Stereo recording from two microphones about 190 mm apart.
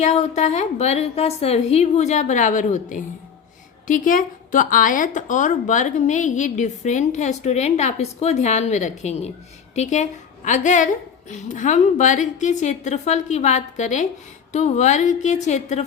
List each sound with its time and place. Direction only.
0.0 s a woman's voice: 35° left (ahead or behind)